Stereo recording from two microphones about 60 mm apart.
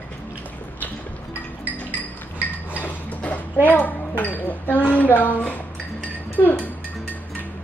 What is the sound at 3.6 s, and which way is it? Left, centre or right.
Speech, left.